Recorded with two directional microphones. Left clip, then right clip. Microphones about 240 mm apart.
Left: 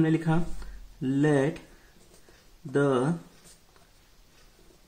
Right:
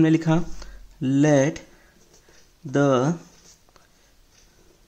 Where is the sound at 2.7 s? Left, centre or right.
Right.